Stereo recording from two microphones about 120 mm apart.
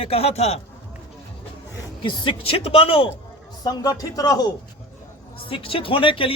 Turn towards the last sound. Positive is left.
turn(degrees=45)  # may be behind; listen again after turning